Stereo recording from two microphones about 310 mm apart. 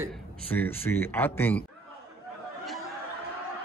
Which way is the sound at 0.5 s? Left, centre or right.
Centre.